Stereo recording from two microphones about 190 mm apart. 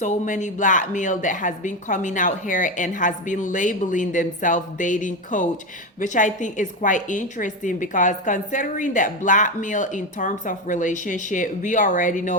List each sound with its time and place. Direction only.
0.0 s a woman's voice: 40° left (ahead or behind)